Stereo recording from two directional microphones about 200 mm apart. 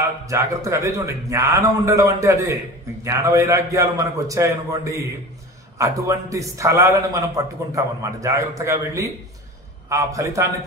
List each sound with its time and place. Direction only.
0.3 s a man's voice: 15° right (ahead or behind)